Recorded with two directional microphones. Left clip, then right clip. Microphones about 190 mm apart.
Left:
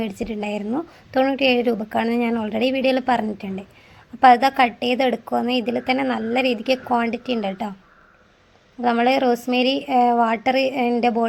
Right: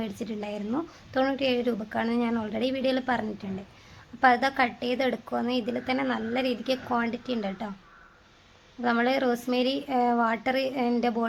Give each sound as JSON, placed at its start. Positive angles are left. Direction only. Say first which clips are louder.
{"t": 0.0, "sound": "a woman's voice", "louder": "left 8 dB", "side_deg": 25}
{"t": 8.8, "sound": "a woman's voice", "louder": "left 7 dB", "side_deg": 25}